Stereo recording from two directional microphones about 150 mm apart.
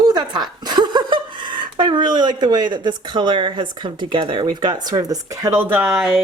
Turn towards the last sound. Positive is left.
turn(degrees=-15)  # may be behind; listen again after turning